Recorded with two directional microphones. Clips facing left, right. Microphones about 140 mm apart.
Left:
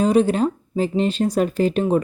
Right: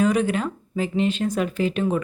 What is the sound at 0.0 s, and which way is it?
A woman's voice, 30° left (ahead or behind).